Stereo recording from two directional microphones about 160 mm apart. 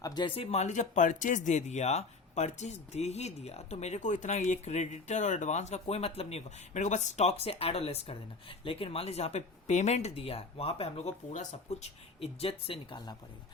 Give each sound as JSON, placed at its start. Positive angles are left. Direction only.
{"t": 0.0, "sound": "speech", "side_deg": 25}